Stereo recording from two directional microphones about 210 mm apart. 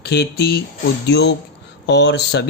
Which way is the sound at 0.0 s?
50° left (ahead or behind).